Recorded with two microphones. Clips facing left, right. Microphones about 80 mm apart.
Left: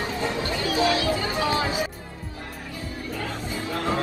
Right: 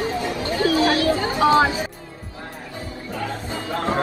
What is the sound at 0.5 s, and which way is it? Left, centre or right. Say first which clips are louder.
Speech: right 6 dB; right.